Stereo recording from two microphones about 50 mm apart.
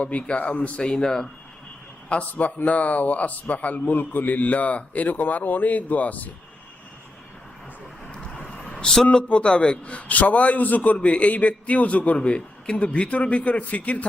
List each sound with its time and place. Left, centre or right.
0.0 s a man's voice: left
2.3 s a man's voice: left
8.1 s vehicle: centre
8.4 s a sound: centre
9.1 s a man's voice: left